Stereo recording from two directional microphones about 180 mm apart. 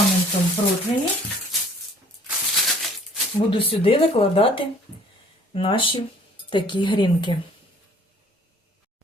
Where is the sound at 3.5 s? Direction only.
30° left (ahead or behind).